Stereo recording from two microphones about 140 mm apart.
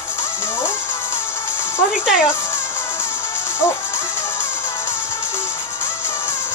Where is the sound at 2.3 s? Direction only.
15° left (ahead or behind).